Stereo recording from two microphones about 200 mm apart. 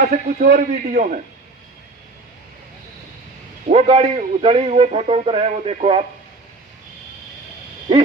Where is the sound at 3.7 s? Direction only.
30° right (ahead or behind).